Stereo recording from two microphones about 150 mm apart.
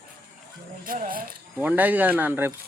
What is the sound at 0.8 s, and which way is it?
Speech, 70° right (ahead or behind).